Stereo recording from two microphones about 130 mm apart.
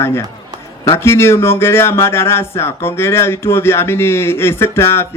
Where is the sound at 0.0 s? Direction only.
20° left (ahead or behind).